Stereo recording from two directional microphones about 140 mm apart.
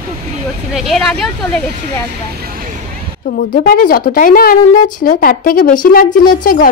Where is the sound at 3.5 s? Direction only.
90° left.